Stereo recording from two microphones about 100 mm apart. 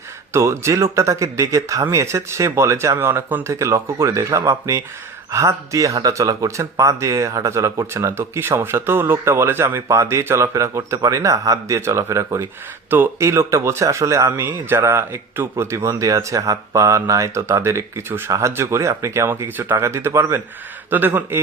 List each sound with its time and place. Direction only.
0.3 s speech: 30° right (ahead or behind)